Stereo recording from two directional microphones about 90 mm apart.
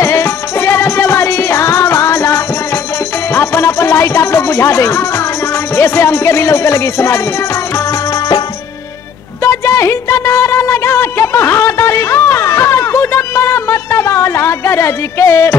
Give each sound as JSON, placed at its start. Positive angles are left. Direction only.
{"t": 0.0, "sound": "music", "side_deg": 30}
{"t": 5.8, "sound": "speech", "side_deg": 30}
{"t": 9.4, "sound": "a sound", "side_deg": 35}